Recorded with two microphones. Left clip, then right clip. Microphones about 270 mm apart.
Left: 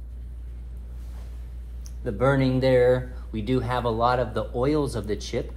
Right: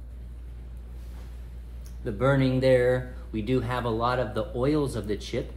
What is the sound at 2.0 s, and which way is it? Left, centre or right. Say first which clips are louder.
Speech: left 2 dB; centre.